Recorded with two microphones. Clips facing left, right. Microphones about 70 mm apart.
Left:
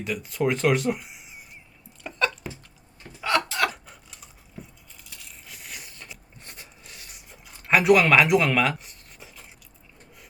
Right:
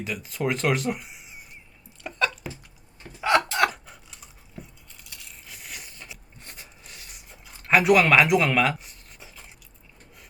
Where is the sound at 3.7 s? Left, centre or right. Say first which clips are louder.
Even; centre.